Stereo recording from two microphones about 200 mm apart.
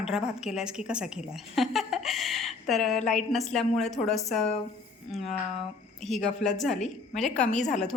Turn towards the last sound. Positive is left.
turn(degrees=35)  # may be behind; listen again after turning